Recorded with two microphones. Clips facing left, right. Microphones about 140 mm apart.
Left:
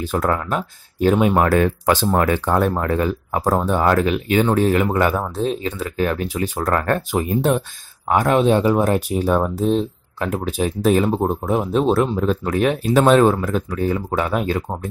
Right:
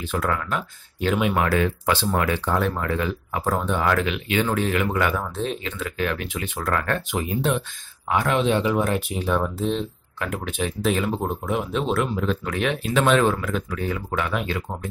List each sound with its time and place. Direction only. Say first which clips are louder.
0.0 s speech: left 5 dB; 40° left (ahead or behind)